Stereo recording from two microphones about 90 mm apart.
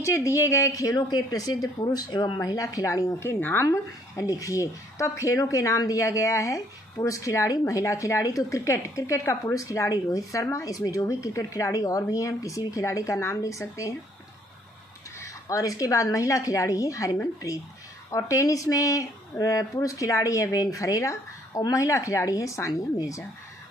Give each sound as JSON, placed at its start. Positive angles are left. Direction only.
{"t": 0.0, "sound": "speech", "side_deg": 35}
{"t": 3.6, "sound": "speech", "side_deg": 35}
{"t": 15.1, "sound": "speech", "side_deg": 40}